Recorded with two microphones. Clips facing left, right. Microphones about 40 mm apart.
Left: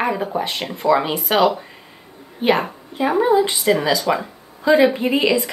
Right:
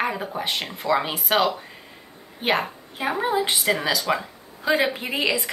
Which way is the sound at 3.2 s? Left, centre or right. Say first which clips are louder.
Left 8 dB; centre.